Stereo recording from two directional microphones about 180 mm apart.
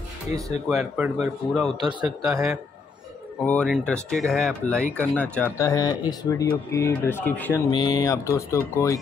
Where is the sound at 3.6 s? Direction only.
Centre (ahead or behind).